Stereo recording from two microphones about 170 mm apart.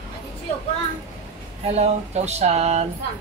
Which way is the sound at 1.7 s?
40° right (ahead or behind).